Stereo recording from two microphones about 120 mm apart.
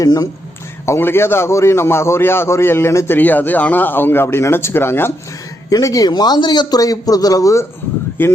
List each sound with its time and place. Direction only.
0.0 s a man's voice: 30° left (ahead or behind)
5.7 s a man's voice: 30° left (ahead or behind)